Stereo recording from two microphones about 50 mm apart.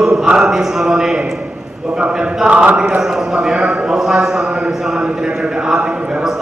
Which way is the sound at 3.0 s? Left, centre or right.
Centre.